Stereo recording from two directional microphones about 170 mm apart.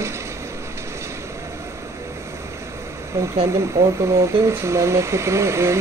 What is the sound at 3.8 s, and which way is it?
Speech, 15° right (ahead or behind).